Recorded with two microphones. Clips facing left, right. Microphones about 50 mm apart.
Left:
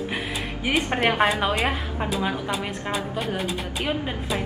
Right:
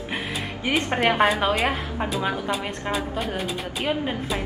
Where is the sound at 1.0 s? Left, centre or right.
Centre.